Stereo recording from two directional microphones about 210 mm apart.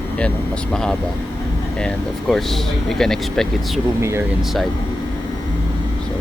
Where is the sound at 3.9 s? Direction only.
15° right (ahead or behind).